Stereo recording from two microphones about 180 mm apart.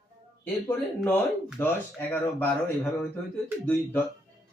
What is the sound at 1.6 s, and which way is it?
Speech, 15° left (ahead or behind).